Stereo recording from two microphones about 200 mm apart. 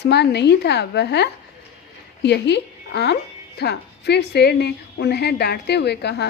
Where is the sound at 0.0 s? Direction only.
55° left (ahead or behind).